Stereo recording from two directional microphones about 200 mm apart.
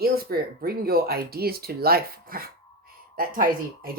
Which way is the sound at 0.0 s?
50° right (ahead or behind).